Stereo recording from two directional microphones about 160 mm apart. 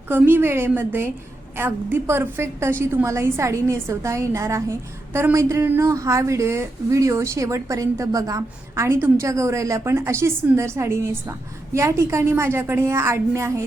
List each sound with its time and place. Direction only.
0.1 s a woman's voice: 15° right (ahead or behind)